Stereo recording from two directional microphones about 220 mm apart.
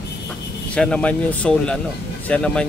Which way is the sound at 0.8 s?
5° left (ahead or behind).